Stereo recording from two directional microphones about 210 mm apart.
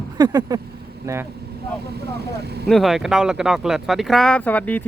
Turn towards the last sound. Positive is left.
turn(degrees=5)  # may be behind; listen again after turning